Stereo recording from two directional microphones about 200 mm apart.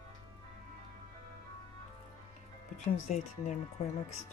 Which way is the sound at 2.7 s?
35° left (ahead or behind).